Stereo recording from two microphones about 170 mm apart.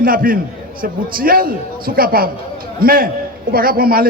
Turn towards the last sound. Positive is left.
turn(degrees=-60)  # may be behind; listen again after turning